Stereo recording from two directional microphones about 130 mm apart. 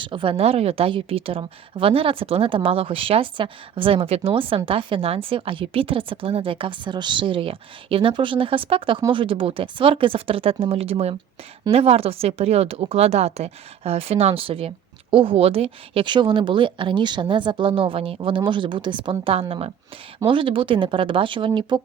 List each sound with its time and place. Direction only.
0.0 s a woman's voice: 40° right (ahead or behind)